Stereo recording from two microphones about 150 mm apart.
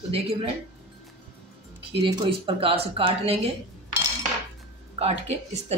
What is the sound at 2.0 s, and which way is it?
Speech, 35° right (ahead or behind).